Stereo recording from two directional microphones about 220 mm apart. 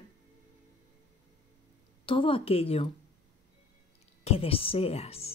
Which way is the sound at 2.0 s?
25° left (ahead or behind).